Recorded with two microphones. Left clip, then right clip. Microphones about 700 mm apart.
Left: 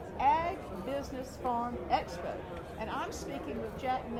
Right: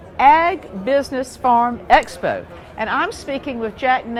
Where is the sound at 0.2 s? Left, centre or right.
Right.